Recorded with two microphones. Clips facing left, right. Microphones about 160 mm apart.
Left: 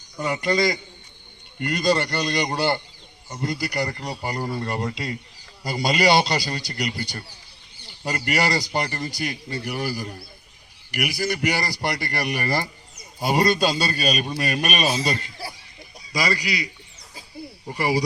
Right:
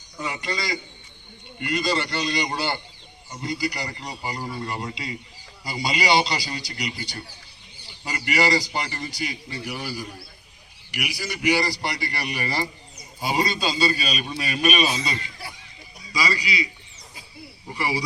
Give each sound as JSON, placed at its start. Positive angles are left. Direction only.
{"t": 0.3, "sound": "a man's voice", "side_deg": 50}
{"t": 11.3, "sound": "a man's voice", "side_deg": 50}
{"t": 17.7, "sound": "a man's voice", "side_deg": 45}